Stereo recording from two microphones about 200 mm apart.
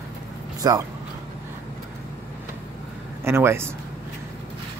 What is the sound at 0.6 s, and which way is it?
Speech, 20° right (ahead or behind).